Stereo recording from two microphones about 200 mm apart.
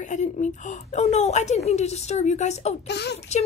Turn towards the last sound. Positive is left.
turn(degrees=55)  # may be behind; listen again after turning